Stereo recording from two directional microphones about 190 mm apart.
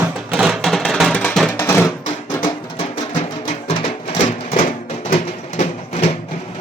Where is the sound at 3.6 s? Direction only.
35° left (ahead or behind).